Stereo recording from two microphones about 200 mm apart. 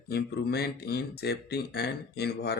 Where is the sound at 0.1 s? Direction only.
55° left (ahead or behind).